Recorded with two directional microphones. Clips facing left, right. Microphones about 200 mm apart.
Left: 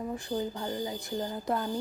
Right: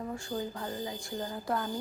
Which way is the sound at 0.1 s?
20° left (ahead or behind).